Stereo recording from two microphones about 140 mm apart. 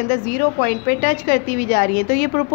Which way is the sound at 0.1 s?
90° left.